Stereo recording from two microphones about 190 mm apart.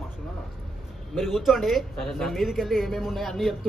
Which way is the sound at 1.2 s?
Centre (ahead or behind).